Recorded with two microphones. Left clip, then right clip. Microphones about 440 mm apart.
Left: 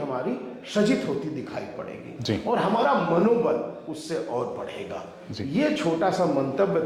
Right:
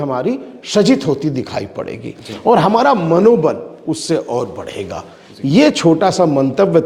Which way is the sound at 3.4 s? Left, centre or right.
Right.